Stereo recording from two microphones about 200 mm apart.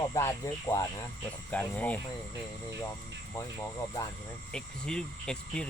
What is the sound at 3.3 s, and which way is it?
Speech, 15° left (ahead or behind).